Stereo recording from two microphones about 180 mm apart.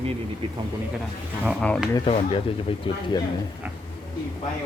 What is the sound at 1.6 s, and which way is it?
Speech, 5° left (ahead or behind).